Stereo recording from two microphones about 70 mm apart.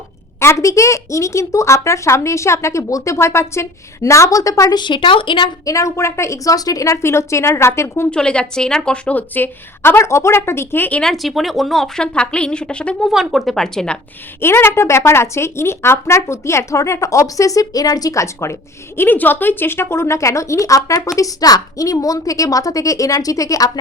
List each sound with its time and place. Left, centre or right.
0.3 s a woman's voice: left
4.7 s speech: left
5.6 s a woman's voice: left
8.1 s a woman's voice: centre; by 10.0 s left
10.0 s speech: left
11.0 s speech: centre
12.1 s a woman's voice: centre
13.1 s speech: centre
14.4 s speech: left
18.9 s a woman's voice: left